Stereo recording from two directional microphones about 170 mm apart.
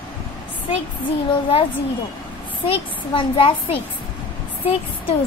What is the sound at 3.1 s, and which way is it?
Speech, 30° left (ahead or behind).